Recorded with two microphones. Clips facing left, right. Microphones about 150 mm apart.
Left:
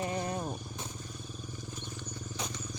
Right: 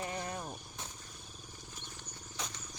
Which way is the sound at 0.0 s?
25° left (ahead or behind).